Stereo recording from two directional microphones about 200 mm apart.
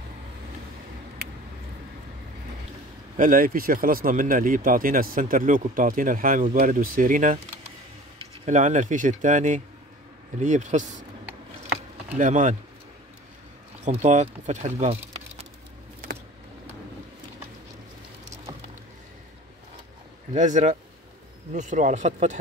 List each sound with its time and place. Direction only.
3.2 s speech: 45° right (ahead or behind)
8.5 s speech: 40° right (ahead or behind)
12.1 s speech: 40° right (ahead or behind)
13.8 s speech: 35° right (ahead or behind)
20.3 s speech: 40° right (ahead or behind)